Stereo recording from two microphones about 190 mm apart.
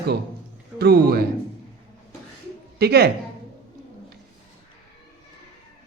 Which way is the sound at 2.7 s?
60° right (ahead or behind).